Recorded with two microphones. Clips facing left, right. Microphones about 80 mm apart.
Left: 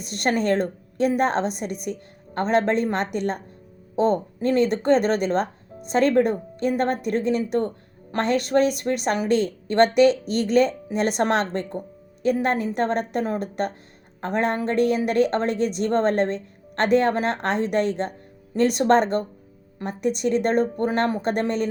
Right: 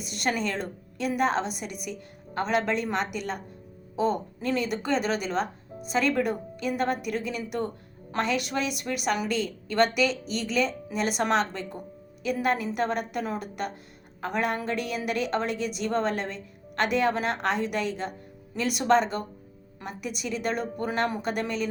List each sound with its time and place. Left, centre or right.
0.0 s a woman's voice: left
4.4 s a woman's voice: left